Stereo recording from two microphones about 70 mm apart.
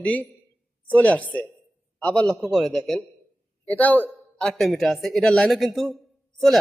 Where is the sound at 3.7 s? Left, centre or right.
Left.